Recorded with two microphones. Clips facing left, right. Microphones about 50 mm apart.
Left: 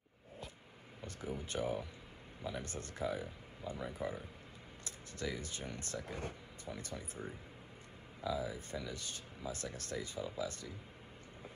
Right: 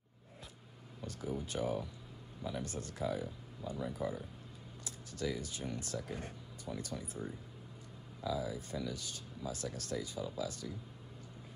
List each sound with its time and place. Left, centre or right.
1.0 s speech: left
8.2 s speech: left